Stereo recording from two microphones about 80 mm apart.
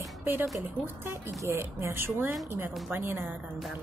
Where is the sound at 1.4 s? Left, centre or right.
Right.